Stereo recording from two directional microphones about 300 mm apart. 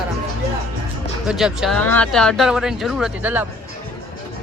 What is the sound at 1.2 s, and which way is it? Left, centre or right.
Speech, centre.